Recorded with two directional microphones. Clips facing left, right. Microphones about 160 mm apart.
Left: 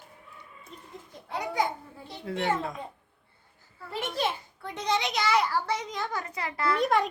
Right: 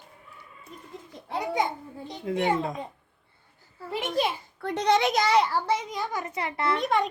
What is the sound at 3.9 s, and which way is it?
Speech, 10° right (ahead or behind).